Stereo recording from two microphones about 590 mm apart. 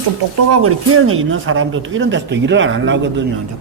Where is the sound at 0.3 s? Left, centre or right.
Right.